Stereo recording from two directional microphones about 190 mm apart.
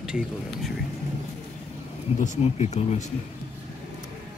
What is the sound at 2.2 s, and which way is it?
Speech, 35° left (ahead or behind).